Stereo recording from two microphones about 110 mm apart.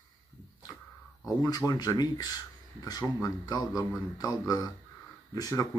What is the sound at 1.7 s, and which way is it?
Speech, 40° left (ahead or behind).